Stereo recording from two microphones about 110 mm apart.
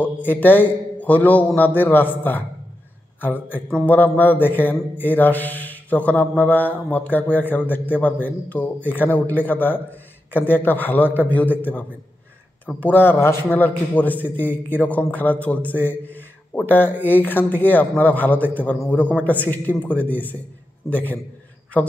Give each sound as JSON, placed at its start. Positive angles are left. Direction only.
{"t": 0.0, "sound": "a man's voice", "side_deg": 15}